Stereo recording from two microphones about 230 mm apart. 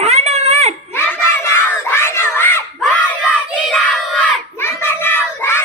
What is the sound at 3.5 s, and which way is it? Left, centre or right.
Crowd, centre.